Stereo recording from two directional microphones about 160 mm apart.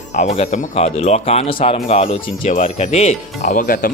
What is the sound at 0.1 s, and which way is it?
Speech, 45° left (ahead or behind).